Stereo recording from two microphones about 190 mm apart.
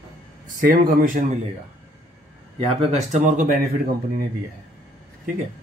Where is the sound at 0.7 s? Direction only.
50° right (ahead or behind).